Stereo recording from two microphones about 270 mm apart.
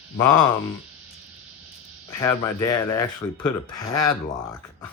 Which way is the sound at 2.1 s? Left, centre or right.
Centre.